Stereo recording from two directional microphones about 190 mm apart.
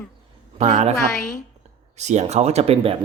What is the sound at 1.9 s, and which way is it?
Speech, 35° right (ahead or behind).